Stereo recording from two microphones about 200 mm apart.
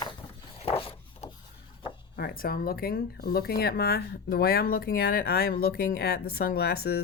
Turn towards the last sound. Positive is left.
turn(degrees=50)  # may be behind; listen again after turning